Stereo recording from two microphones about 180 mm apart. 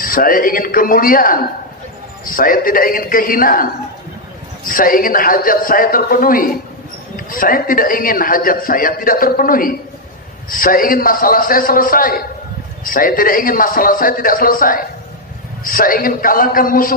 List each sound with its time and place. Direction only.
0.0 s a man's voice: 50° left (ahead or behind)